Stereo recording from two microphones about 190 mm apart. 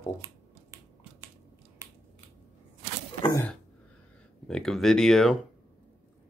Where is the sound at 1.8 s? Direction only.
15° right (ahead or behind).